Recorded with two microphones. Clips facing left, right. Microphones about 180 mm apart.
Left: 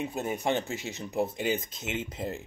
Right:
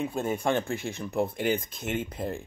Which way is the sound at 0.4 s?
55° right (ahead or behind).